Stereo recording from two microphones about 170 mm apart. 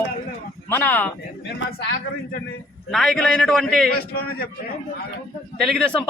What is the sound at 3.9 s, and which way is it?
Speech, 65° left (ahead or behind).